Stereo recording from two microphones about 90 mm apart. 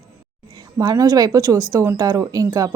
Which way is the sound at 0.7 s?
45° right (ahead or behind).